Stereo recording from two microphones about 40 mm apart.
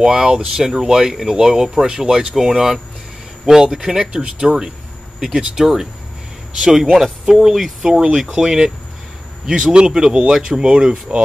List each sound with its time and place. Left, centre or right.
0.0 s speech: centre